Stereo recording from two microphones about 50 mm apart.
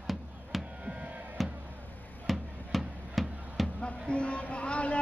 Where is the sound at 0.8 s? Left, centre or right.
Right.